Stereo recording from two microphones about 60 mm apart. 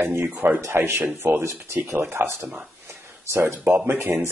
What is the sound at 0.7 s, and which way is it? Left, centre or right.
Speech, right.